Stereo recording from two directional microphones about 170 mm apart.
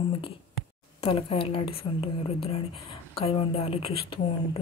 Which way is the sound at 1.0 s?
30° left (ahead or behind).